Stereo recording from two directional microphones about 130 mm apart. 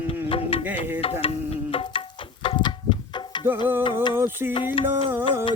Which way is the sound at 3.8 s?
35° left (ahead or behind).